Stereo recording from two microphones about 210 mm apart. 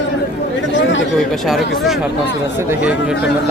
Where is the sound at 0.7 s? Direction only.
60° left (ahead or behind).